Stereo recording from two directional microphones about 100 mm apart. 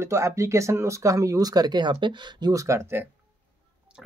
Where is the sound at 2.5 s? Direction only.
30° right (ahead or behind).